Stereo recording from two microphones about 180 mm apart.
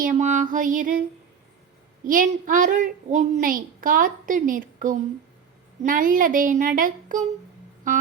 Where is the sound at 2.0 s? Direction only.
50° right (ahead or behind).